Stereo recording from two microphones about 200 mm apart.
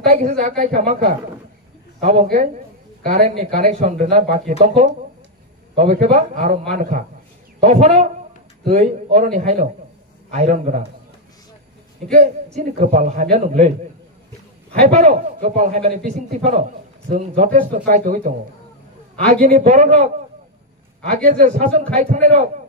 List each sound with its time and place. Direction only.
0.0 s a man's voice: 35° right (ahead or behind)
12.5 s a man's voice: 35° right (ahead or behind)
19.4 s a man's voice: 35° right (ahead or behind)